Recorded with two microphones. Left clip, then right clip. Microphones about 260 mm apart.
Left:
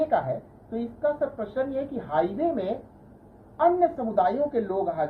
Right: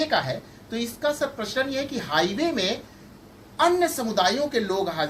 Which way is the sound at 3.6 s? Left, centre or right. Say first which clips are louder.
Even; right.